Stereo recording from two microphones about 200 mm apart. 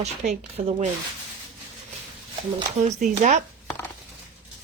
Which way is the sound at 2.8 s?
40° right (ahead or behind).